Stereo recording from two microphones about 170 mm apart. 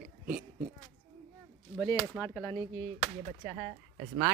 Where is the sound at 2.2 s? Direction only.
10° left (ahead or behind).